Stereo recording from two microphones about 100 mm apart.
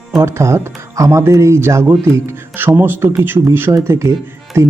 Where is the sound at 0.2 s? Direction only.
25° right (ahead or behind).